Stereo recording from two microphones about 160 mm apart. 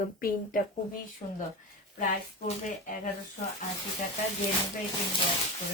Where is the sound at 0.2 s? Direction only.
65° left (ahead or behind).